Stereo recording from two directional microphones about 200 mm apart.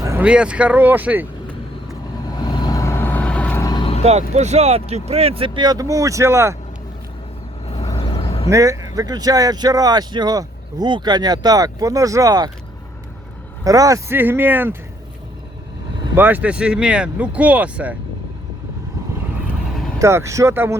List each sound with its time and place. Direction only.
0.0 s speech: 10° right (ahead or behind)
2.7 s vehicle: 15° left (ahead or behind)
4.0 s speech: 35° right (ahead or behind); by 6.6 s 15° right (ahead or behind)
7.9 s vehicle: 30° left (ahead or behind)
8.4 s speech: 15° right (ahead or behind)
13.7 s speech: 15° right (ahead or behind)
16.1 s speech: 10° right (ahead or behind)
20.0 s speech: 15° right (ahead or behind)